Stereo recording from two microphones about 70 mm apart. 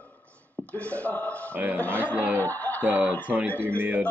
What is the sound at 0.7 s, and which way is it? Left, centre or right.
Speech, left.